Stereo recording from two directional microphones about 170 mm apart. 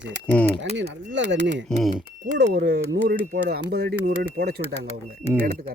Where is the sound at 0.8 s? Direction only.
90° right.